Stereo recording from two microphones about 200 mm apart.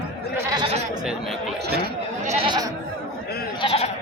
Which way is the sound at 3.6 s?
30° left (ahead or behind).